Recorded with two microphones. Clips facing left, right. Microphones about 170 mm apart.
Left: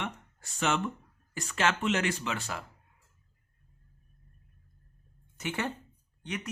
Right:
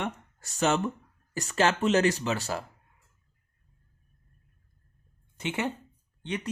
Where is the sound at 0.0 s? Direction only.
40° right (ahead or behind).